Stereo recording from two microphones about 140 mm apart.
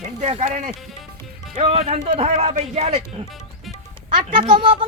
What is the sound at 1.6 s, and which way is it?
Speech, 45° right (ahead or behind).